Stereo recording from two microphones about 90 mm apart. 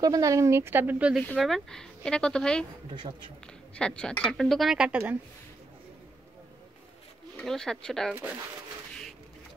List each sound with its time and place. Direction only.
0.0 s speech: 40° right (ahead or behind); by 1.1 s 20° right (ahead or behind)
1.3 s speech: 5° left (ahead or behind)
3.7 s speech: 10° left (ahead or behind); by 5.1 s 15° right (ahead or behind)
7.3 s speech: 5° left (ahead or behind)
8.1 s speech: 20° right (ahead or behind)